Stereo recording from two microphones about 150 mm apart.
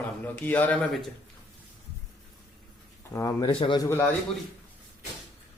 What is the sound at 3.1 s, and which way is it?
Speech, 20° left (ahead or behind).